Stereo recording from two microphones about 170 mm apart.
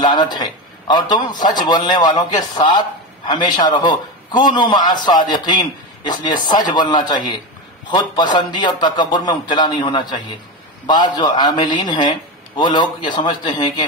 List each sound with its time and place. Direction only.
0.0 s a man's voice: 25° left (ahead or behind)